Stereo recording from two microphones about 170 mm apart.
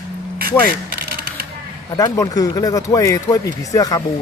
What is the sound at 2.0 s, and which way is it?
Speech, 20° left (ahead or behind).